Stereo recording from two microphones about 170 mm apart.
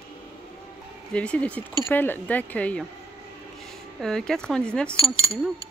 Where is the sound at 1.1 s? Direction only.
5° left (ahead or behind).